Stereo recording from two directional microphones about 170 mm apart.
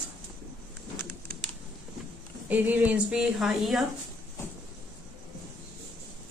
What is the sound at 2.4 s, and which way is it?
A woman's voice, 10° right (ahead or behind).